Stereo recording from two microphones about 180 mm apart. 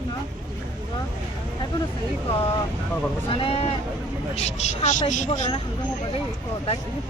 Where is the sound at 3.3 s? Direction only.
30° left (ahead or behind).